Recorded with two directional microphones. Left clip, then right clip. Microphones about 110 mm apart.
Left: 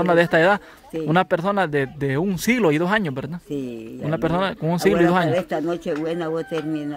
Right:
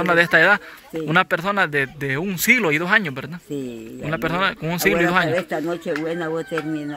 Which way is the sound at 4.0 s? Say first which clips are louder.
Right 1 dB; 50° left (ahead or behind).